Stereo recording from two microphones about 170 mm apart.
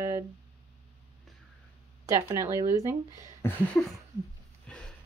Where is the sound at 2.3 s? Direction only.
15° right (ahead or behind).